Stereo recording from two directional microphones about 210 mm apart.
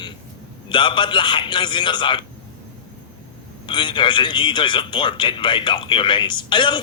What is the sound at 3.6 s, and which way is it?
Speech, 25° left (ahead or behind).